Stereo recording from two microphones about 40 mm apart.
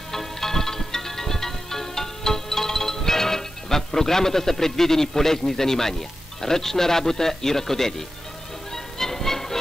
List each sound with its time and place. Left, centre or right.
0.1 s music: centre
6.4 s a man's voice: centre
8.7 s music: centre